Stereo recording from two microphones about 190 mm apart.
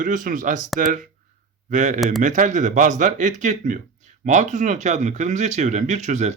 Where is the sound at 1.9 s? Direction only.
Centre (ahead or behind).